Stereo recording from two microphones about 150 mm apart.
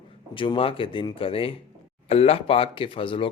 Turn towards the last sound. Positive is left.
turn(degrees=35)  # may be behind; listen again after turning